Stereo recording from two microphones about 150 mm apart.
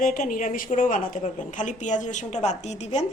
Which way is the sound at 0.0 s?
65° left (ahead or behind).